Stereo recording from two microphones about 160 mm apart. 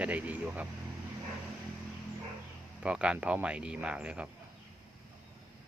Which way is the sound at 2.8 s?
5° right (ahead or behind).